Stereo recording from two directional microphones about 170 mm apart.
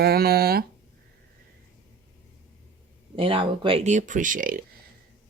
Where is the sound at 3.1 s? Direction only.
30° right (ahead or behind); by 4.6 s 55° right (ahead or behind).